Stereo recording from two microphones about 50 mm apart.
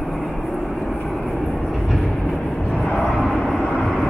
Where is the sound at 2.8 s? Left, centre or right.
Centre.